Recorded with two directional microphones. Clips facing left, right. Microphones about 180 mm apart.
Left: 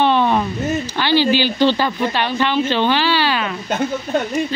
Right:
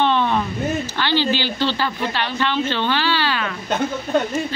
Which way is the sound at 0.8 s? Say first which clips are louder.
Left 4 dB; 15° left (ahead or behind).